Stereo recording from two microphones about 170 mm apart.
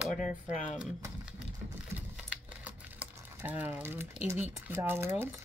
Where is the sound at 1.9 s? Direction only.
10° right (ahead or behind).